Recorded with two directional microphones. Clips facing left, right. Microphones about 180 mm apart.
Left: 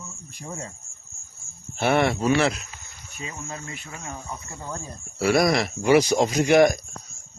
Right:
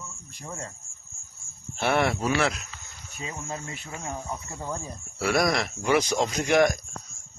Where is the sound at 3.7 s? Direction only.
30° right (ahead or behind).